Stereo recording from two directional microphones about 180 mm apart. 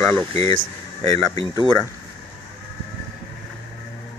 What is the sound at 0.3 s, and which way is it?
Speech, 35° right (ahead or behind).